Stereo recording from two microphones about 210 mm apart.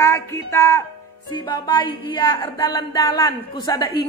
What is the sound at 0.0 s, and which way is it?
Music, 15° left (ahead or behind).